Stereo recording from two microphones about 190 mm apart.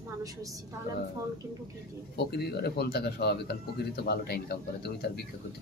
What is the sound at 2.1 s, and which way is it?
A man's voice, 55° left (ahead or behind).